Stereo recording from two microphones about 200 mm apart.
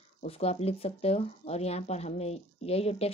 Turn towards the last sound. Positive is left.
turn(degrees=30)  # may be behind; listen again after turning